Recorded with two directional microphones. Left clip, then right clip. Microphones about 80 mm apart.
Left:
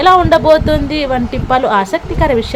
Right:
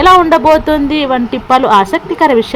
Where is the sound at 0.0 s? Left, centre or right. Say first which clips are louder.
Right 2 dB; right.